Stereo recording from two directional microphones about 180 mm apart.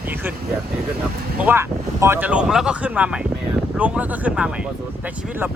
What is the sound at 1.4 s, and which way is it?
Speech, 10° right (ahead or behind).